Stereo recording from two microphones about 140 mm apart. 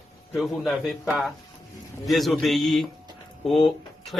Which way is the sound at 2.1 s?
Centre (ahead or behind).